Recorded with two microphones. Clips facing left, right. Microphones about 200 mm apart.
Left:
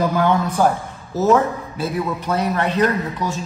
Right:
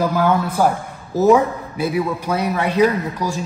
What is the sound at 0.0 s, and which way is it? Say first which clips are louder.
A man's voice: even; 5° right (ahead or behind).